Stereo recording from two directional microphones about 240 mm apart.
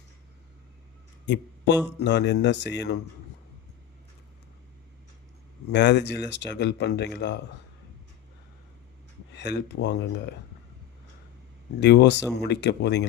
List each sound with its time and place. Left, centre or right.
1.3 s speech: left
5.7 s speech: left
9.3 s speech: left
11.8 s speech: left